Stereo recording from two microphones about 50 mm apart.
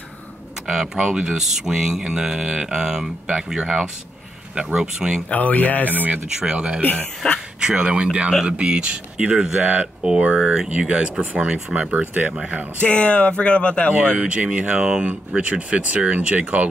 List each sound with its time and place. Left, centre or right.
0.9 s speech: centre
5.3 s speech: left
5.9 s speech: right
6.2 s speech: centre
6.8 s speech: left
7.6 s speech: centre
9.6 s speech: right
10.0 s speech: right
11.9 s speech: right
12.8 s speech: left
14.4 s speech: right
14.7 s speech: centre